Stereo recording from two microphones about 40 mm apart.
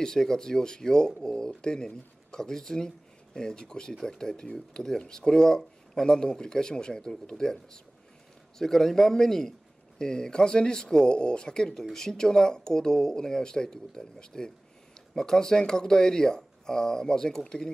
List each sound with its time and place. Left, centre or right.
0.0 s speech: centre